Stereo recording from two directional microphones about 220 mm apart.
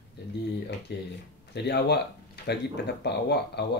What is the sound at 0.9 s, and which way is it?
Speech, 50° left (ahead or behind).